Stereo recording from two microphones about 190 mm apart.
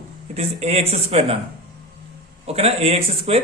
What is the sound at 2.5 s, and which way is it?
Speech, 35° right (ahead or behind).